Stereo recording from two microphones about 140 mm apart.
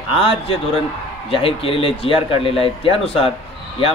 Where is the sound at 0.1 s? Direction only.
40° left (ahead or behind).